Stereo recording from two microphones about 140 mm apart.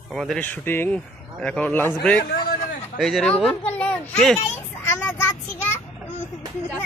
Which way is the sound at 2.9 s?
Centre (ahead or behind).